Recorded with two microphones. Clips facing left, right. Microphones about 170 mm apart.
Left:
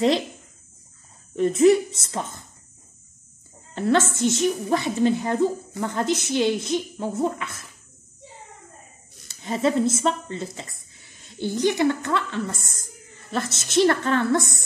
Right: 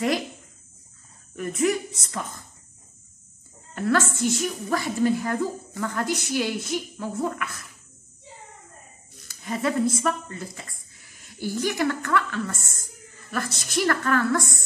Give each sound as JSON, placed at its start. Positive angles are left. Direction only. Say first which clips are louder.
{"t": 1.3, "sound": "a woman's voice", "louder": "left 8 dB", "side_deg": 25}
{"t": 3.7, "sound": "a woman's voice", "louder": "left 3 dB", "side_deg": 25}
{"t": 9.3, "sound": "a woman's voice", "louder": "left 4 dB", "side_deg": 25}